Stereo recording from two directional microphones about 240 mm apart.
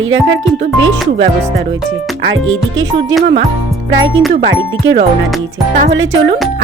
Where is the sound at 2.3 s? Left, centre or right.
Right.